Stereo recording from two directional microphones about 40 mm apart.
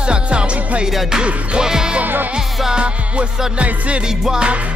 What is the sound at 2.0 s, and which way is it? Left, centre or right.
Music, right.